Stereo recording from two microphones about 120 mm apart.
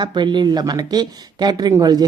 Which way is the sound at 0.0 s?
40° right (ahead or behind).